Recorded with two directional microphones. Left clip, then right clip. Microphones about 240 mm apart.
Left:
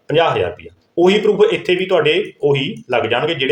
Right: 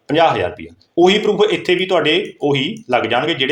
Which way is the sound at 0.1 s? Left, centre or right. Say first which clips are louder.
Right 1 dB; right.